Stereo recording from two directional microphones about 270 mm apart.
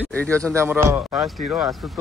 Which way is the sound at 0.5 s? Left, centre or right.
Centre.